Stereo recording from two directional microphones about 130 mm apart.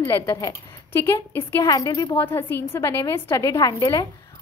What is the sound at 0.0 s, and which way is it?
A woman's voice, 25° left (ahead or behind).